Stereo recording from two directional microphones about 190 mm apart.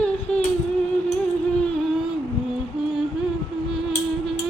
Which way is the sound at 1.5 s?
5° left (ahead or behind).